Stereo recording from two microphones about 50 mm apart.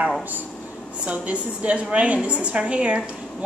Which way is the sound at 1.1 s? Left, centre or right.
Right.